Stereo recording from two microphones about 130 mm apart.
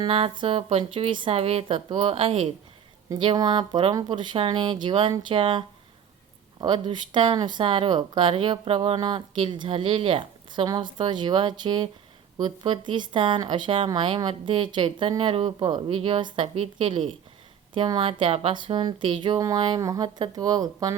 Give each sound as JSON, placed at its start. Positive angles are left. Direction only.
{"t": 0.0, "sound": "speech", "side_deg": -40}
{"t": 3.2, "sound": "speech", "side_deg": -35}